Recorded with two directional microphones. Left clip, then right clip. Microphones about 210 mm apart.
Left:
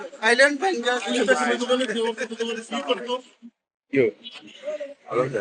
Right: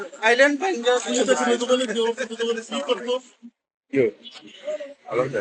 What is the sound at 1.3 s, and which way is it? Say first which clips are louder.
Speech: right 1 dB; 55° right (ahead or behind).